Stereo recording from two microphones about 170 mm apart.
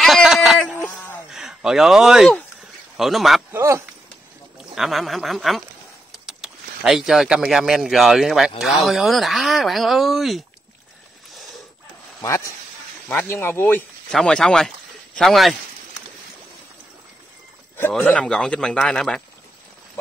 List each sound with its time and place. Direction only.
0.0 s a sound: centre (ahead or behind)
3.0 s speech: centre (ahead or behind)
3.5 s speech: 15° right (ahead or behind)
4.7 s speech: centre (ahead or behind)
12.2 s speech: 20° left (ahead or behind); by 15.5 s centre (ahead or behind)
18.0 s speech: 5° left (ahead or behind)